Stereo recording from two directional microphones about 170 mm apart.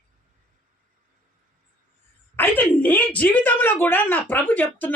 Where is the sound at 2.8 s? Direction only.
10° left (ahead or behind).